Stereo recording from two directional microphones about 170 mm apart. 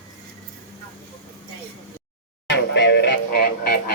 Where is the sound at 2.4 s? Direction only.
90° left; by 3.8 s 65° left (ahead or behind).